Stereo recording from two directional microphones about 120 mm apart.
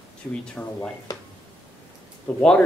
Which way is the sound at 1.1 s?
30° left (ahead or behind).